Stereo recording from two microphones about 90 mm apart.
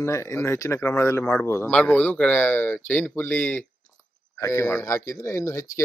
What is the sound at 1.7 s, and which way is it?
Speech, 15° left (ahead or behind).